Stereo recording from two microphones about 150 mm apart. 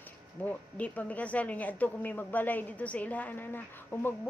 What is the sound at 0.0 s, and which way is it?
Speech, 10° left (ahead or behind).